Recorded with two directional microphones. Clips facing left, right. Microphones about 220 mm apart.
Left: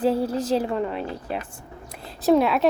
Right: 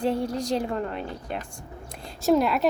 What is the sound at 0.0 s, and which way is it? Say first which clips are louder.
A woman's voice: left 4 dB; 5° left (ahead or behind).